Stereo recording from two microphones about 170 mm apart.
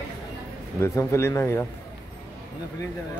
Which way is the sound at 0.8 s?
15° left (ahead or behind).